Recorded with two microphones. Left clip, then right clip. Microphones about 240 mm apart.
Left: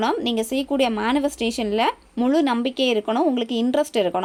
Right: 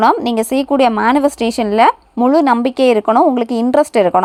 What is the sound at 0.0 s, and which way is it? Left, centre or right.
A woman's voice, right.